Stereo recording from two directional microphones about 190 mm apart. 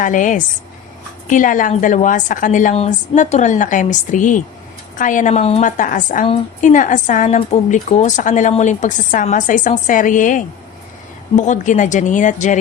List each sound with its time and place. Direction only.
0.0 s a woman's voice: 40° left (ahead or behind)